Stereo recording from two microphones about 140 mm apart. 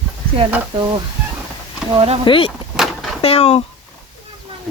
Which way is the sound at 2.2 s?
40° left (ahead or behind).